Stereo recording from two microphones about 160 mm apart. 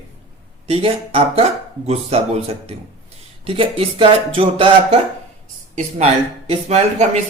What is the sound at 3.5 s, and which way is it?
Speech, 35° right (ahead or behind).